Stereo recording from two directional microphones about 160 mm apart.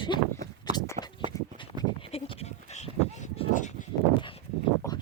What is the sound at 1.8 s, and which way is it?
Goat, 35° left (ahead or behind).